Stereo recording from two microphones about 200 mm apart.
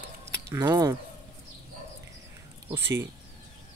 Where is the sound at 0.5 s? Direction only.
20° right (ahead or behind).